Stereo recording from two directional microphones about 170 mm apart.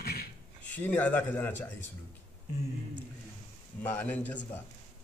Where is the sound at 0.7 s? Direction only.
10° left (ahead or behind).